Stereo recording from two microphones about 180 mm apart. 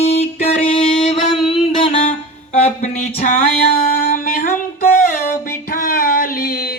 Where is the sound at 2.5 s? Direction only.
35° left (ahead or behind).